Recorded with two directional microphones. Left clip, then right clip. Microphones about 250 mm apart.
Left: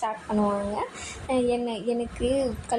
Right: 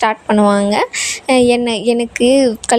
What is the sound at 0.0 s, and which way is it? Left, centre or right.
A woman's voice, right.